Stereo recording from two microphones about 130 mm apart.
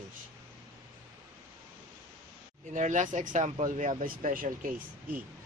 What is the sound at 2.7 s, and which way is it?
Speech, 75° right (ahead or behind).